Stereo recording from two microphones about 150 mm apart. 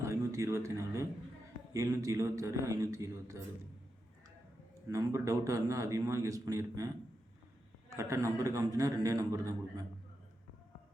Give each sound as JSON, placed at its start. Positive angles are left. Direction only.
{"t": 0.0, "sound": "a man's voice", "side_deg": -20}
{"t": 4.9, "sound": "a man's voice", "side_deg": -20}